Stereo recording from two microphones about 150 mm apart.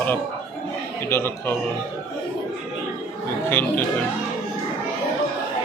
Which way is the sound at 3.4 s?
15° left (ahead or behind).